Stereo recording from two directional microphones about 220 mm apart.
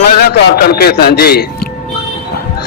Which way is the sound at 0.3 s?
45° left (ahead or behind).